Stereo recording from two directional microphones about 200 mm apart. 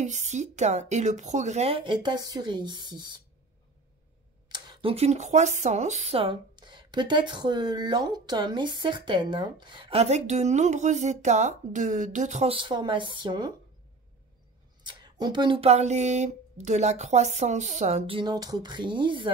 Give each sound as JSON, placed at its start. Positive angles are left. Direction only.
{"t": 0.0, "sound": "speech", "side_deg": -35}
{"t": 4.5, "sound": "speech", "side_deg": -25}
{"t": 14.8, "sound": "speech", "side_deg": -20}